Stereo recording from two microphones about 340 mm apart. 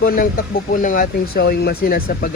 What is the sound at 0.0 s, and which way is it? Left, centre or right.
Speech, left.